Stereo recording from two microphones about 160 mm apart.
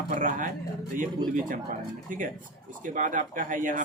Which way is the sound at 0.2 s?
55° right (ahead or behind).